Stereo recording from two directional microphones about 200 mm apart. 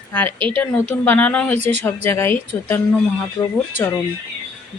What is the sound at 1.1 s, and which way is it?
Speech, 5° left (ahead or behind).